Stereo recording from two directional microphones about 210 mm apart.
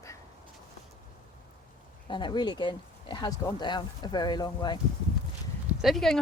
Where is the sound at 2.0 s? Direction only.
25° left (ahead or behind).